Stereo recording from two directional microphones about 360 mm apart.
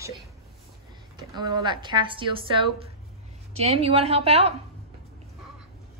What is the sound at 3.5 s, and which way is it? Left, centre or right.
A woman's voice, centre.